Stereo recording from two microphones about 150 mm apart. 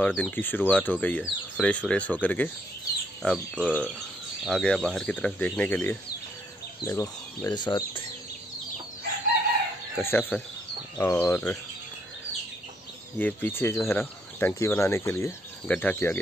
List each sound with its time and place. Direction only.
0.0 s speech: 10° left (ahead or behind); by 8.0 s 30° left (ahead or behind)
10.0 s speech: 15° left (ahead or behind)
13.2 s speech: 15° left (ahead or behind)